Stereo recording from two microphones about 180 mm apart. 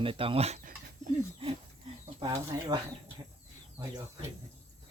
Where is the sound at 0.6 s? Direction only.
50° right (ahead or behind).